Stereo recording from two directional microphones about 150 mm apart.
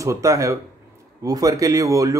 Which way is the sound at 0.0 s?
20° right (ahead or behind).